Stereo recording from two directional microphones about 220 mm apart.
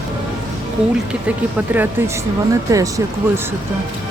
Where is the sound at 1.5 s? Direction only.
10° right (ahead or behind).